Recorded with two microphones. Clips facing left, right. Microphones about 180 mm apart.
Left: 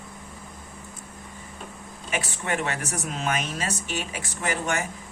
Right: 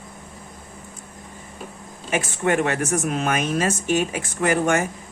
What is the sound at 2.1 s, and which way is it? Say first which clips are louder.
Speech: right 7 dB; 50° right (ahead or behind).